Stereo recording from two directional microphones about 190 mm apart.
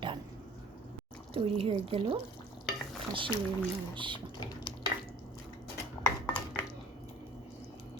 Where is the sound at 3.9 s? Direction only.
25° right (ahead or behind).